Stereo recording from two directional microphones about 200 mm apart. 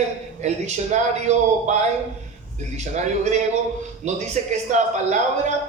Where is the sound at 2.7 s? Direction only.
35° right (ahead or behind).